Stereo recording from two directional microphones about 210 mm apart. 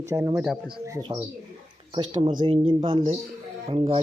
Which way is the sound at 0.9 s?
15° right (ahead or behind).